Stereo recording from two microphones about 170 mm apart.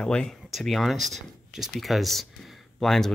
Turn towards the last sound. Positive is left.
turn(degrees=0)  # may be behind; listen again after turning